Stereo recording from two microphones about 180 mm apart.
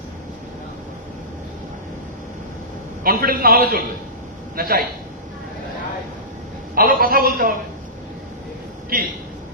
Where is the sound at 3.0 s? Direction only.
55° right (ahead or behind).